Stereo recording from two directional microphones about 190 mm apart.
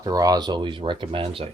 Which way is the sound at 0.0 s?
20° right (ahead or behind).